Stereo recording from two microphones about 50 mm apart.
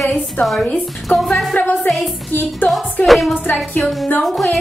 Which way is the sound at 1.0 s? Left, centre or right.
Centre.